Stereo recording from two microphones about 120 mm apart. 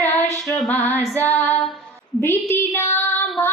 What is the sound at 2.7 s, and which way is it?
Child singing, 15° left (ahead or behind).